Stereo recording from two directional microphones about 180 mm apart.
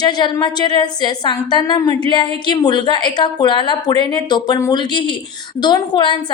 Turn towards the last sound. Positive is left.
turn(degrees=25)  # may be behind; listen again after turning